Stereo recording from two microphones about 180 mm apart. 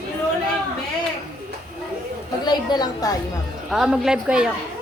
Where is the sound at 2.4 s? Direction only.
25° left (ahead or behind).